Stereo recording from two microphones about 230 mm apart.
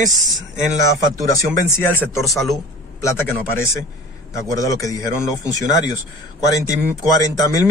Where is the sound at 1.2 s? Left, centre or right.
Centre.